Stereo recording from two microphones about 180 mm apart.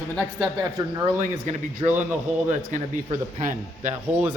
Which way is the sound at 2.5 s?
45° right (ahead or behind).